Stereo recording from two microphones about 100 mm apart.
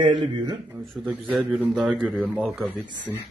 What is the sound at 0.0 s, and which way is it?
Speech, 50° right (ahead or behind).